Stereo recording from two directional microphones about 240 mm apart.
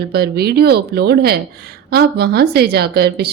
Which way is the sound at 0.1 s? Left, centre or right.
Right.